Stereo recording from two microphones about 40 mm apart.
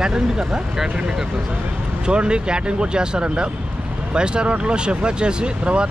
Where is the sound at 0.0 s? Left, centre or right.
Right.